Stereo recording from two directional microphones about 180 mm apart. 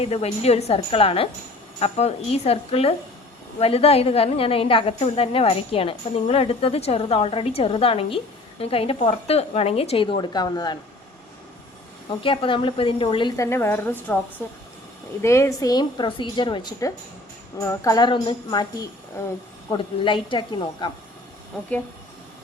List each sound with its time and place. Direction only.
0.0 s a woman's voice: 35° left (ahead or behind)
12.2 s a woman's voice: 30° left (ahead or behind)
13.3 s a woman's voice: 15° left (ahead or behind)